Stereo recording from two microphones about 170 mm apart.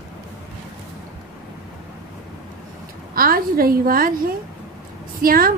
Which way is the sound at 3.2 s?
60° right (ahead or behind).